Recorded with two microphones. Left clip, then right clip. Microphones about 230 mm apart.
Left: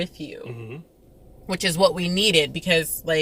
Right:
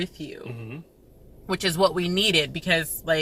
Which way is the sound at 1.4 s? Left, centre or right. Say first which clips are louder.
Left 2 dB; centre.